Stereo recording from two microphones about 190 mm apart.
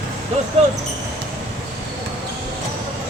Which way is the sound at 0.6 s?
35° right (ahead or behind).